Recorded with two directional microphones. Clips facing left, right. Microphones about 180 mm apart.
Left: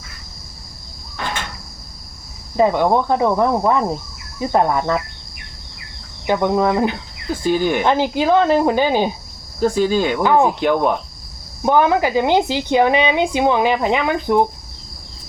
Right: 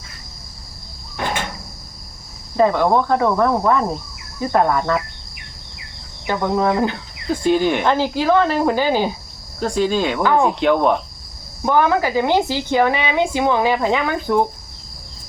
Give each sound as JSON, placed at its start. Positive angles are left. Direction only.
{"t": 2.6, "sound": "speech", "side_deg": 15}
{"t": 6.2, "sound": "speech", "side_deg": 20}
{"t": 7.4, "sound": "speech", "side_deg": 0}
{"t": 7.9, "sound": "a woman's voice", "side_deg": 20}
{"t": 9.6, "sound": "speech", "side_deg": 5}
{"t": 11.6, "sound": "a woman's voice", "side_deg": 20}